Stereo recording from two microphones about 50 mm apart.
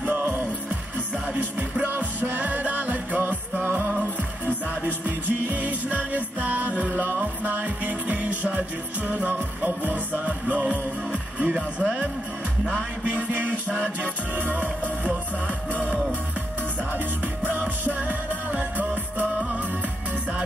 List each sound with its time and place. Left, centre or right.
0.0 s music: right
5.0 s music: right
17.4 s music: right